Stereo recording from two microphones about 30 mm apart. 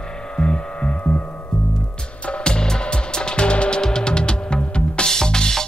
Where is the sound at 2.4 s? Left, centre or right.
Left.